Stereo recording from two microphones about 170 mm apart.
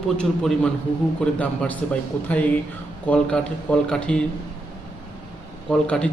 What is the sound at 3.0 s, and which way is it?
A man's voice, 5° left (ahead or behind).